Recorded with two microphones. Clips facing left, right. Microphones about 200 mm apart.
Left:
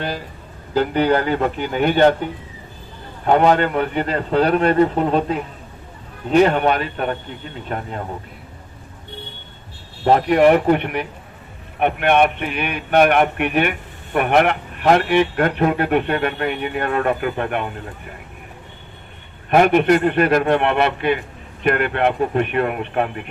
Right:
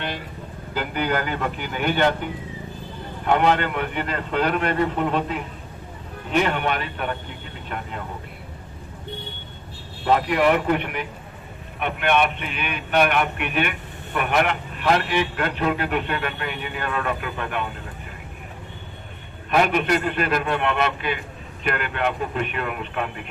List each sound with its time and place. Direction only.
0.7 s a man's voice: 35° left (ahead or behind)
3.2 s a man's voice: 40° left (ahead or behind)
10.0 s a man's voice: 40° left (ahead or behind)
19.5 s a man's voice: 50° left (ahead or behind)